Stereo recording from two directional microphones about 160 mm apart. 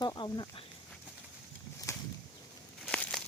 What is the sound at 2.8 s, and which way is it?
Crushing, 5° left (ahead or behind).